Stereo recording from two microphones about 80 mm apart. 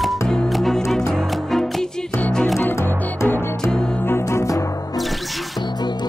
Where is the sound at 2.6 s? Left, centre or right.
Left.